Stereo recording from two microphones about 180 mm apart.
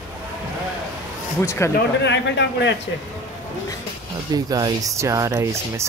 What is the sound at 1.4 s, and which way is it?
Speech, 15° left (ahead or behind).